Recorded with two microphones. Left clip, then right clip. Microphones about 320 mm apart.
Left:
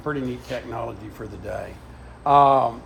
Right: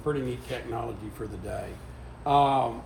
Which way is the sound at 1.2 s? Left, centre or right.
Centre.